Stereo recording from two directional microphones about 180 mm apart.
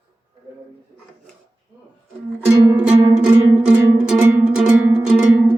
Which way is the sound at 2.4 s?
10° right (ahead or behind).